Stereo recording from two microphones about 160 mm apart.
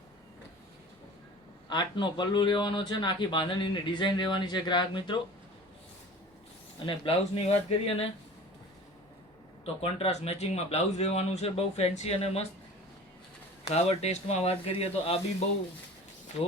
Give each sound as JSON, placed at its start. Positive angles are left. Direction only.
{"t": 1.7, "sound": "speech", "side_deg": 30}
{"t": 6.8, "sound": "a man's voice", "side_deg": 35}
{"t": 9.8, "sound": "a man's voice", "side_deg": 40}
{"t": 13.7, "sound": "a man's voice", "side_deg": 40}